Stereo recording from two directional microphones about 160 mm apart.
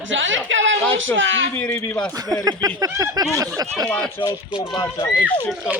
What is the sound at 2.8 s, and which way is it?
Speech, 20° right (ahead or behind).